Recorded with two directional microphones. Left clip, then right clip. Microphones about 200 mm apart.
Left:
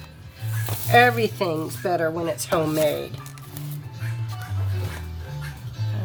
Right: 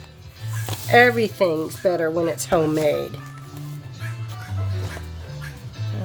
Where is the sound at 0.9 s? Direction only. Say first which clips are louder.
Right 2 dB; 30° right (ahead or behind).